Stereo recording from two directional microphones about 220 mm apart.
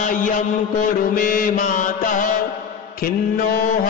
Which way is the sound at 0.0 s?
35° left (ahead or behind).